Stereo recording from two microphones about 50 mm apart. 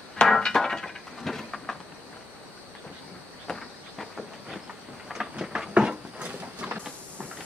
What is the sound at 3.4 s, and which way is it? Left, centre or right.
Train, centre.